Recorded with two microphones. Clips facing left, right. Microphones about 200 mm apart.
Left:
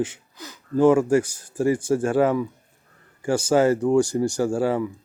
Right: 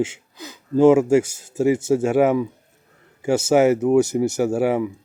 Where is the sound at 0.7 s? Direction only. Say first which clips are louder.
Right 3 dB; 25° right (ahead or behind).